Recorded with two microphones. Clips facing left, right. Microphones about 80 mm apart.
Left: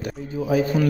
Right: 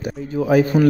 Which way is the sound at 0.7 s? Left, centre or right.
Right.